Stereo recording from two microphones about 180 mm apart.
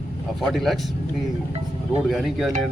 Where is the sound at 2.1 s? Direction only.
Centre (ahead or behind).